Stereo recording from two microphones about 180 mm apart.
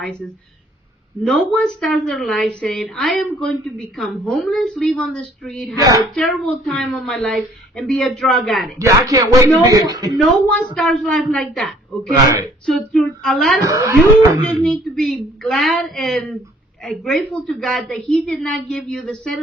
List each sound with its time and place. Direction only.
0.0 s a woman's voice: 5° left (ahead or behind)
8.8 s speech: 20° right (ahead or behind)
10.2 s a woman's voice: 5° left (ahead or behind)
13.7 s speech: 20° right (ahead or behind)
14.4 s a woman's voice: 5° left (ahead or behind)